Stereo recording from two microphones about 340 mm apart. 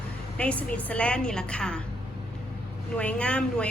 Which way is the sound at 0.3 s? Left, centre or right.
Centre.